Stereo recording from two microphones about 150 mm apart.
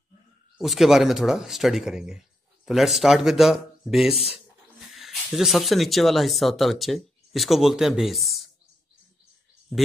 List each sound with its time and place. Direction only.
0.6 s speech: centre (ahead or behind)